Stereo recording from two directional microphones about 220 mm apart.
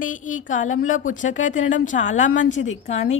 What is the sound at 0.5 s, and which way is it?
A woman's voice, 35° left (ahead or behind).